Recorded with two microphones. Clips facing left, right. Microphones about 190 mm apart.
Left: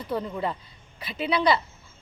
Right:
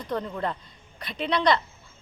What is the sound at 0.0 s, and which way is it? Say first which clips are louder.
Speech: left 1 dB; 5° left (ahead or behind).